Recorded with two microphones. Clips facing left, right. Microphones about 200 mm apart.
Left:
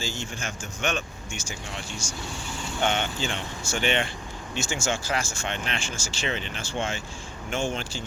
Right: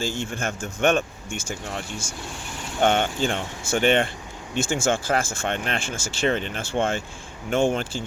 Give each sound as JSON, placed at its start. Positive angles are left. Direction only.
{"t": 0.0, "sound": "speech", "side_deg": -55}
{"t": 2.8, "sound": "speech", "side_deg": -50}